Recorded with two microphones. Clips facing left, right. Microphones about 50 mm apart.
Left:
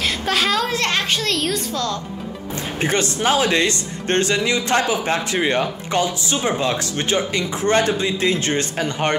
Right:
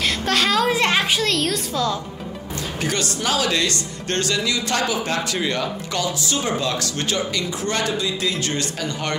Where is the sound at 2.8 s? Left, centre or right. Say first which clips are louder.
Left 4 dB; left.